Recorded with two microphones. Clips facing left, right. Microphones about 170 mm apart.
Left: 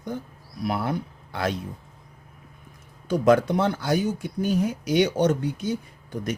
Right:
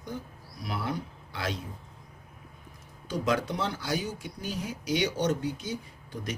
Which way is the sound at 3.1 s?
55° left (ahead or behind).